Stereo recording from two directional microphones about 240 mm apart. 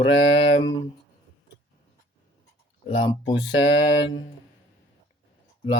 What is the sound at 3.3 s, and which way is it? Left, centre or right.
Mantra, left.